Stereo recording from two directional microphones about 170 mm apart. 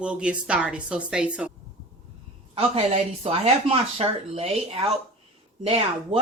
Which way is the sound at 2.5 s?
35° right (ahead or behind).